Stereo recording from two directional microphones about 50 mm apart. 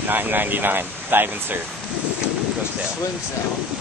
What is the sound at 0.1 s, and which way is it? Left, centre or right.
Speech, right.